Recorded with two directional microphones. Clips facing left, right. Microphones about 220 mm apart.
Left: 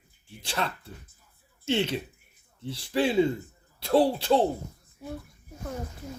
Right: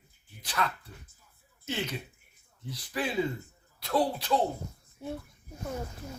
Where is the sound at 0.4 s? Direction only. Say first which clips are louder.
Left 1 dB; 25° left (ahead or behind).